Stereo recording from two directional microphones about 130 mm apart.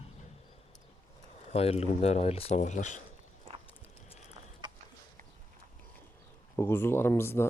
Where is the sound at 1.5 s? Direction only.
50° left (ahead or behind); by 3.0 s 70° left (ahead or behind).